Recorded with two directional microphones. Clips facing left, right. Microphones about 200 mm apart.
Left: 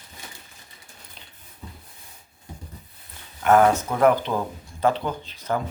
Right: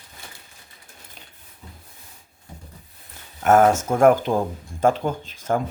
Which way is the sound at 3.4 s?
45° right (ahead or behind).